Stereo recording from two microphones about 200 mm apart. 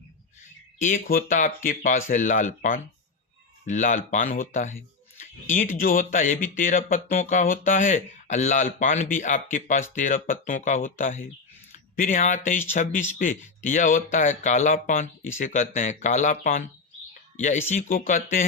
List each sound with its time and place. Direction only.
0.9 s speech: 45° left (ahead or behind)
5.2 s a sound: 40° left (ahead or behind)
5.8 s speech: 45° left (ahead or behind)